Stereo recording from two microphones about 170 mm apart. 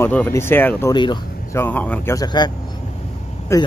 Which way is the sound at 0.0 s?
10° left (ahead or behind).